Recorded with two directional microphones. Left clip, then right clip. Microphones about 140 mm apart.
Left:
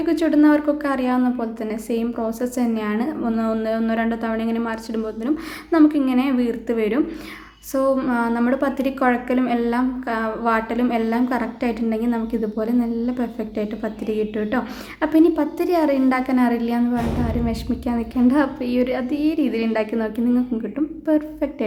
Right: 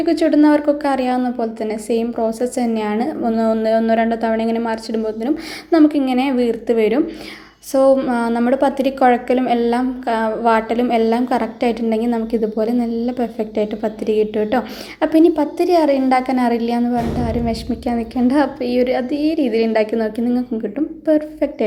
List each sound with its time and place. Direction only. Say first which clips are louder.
0.0 s a woman's voice: right 3 dB; 15° right (ahead or behind)